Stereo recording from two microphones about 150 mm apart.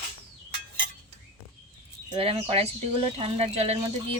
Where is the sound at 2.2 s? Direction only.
40° right (ahead or behind).